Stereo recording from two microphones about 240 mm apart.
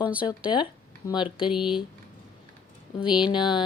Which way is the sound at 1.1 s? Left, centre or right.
Left.